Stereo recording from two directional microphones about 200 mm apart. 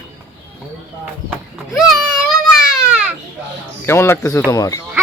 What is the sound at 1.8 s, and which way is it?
Baby cry, centre (ahead or behind).